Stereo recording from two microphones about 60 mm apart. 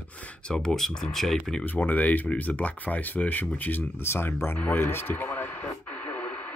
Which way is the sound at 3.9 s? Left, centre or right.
Left.